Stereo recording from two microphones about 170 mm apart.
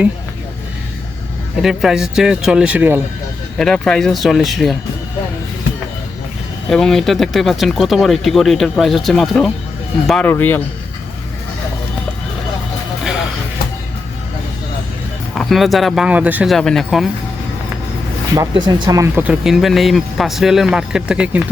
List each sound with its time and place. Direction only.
1.6 s speech: centre (ahead or behind)
3.6 s speech: 5° left (ahead or behind)
6.7 s speech: 5° left (ahead or behind)
15.4 s speech: centre (ahead or behind)
18.6 s speech: 20° right (ahead or behind); by 21.4 s 5° right (ahead or behind)